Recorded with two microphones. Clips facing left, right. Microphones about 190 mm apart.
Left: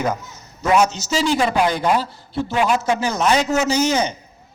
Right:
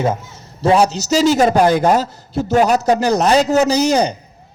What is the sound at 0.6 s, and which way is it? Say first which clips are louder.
A man's voice: right 3 dB; 30° right (ahead or behind).